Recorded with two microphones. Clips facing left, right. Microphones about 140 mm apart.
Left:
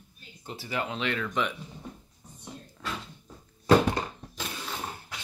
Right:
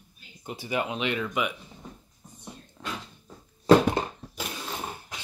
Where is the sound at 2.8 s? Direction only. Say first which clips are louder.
Even; 25° right (ahead or behind).